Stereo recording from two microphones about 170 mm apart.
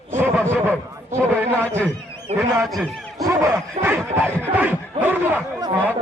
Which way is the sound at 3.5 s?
15° right (ahead or behind).